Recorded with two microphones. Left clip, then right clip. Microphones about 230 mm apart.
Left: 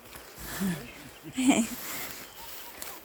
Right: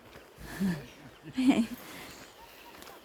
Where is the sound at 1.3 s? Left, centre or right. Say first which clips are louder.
Left 2 dB; centre.